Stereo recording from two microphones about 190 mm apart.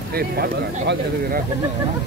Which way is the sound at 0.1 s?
55° right (ahead or behind).